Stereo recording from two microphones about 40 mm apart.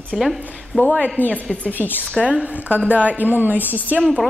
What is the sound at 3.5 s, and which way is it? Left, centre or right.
Speech, left.